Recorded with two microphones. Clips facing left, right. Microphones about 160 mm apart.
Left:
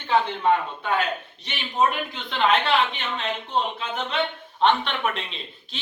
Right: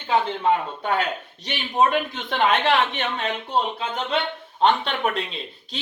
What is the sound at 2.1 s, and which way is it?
Speech, 45° right (ahead or behind).